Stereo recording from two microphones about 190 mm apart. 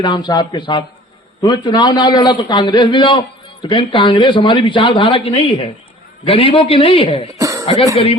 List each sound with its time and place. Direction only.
0.0 s a man's voice: 25° left (ahead or behind)
7.3 s cough: 20° right (ahead or behind)
7.6 s speech: 25° left (ahead or behind)